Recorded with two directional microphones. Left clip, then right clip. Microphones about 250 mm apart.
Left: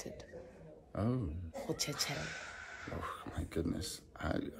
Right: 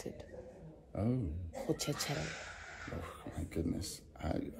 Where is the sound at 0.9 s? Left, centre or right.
Centre.